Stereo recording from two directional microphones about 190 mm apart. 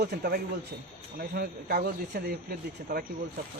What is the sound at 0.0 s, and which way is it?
Speech, 55° right (ahead or behind).